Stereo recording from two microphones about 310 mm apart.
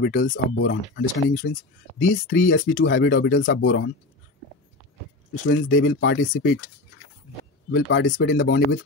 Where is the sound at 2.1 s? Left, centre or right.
Left.